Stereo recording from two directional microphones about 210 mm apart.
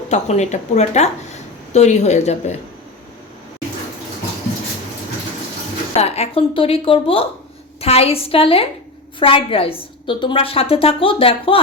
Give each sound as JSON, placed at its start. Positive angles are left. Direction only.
{"t": 0.1, "sound": "a woman's voice", "side_deg": 35}
{"t": 6.0, "sound": "a woman's voice", "side_deg": 30}